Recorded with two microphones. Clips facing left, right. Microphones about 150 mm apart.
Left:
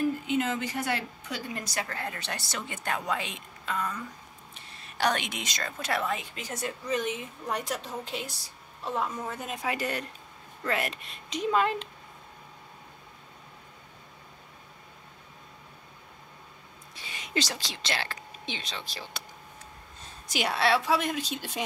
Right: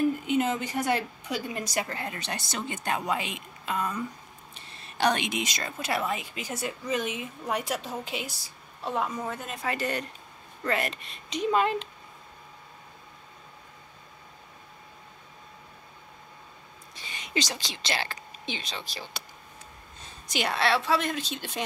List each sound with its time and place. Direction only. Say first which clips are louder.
0.4 s a woman's voice: right 2 dB; 20° right (ahead or behind)
9.3 s speech: even; 5° left (ahead or behind)
16.9 s speech: even; 5° left (ahead or behind)
20.2 s speech: even; 5° left (ahead or behind)